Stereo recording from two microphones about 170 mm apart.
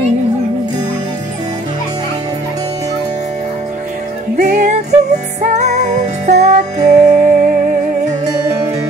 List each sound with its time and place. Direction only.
4.4 s music: 45° right (ahead or behind)